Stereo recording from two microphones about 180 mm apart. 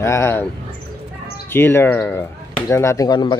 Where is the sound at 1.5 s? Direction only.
10° left (ahead or behind).